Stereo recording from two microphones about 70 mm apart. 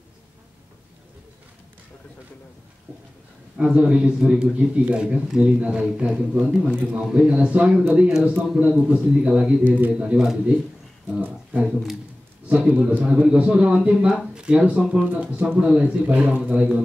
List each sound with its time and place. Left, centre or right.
3.5 s a man's voice: centre
10.1 s a man's voice: centre
11.1 s a man's voice: right